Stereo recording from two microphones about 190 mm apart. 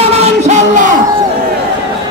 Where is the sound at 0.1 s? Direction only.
35° right (ahead or behind).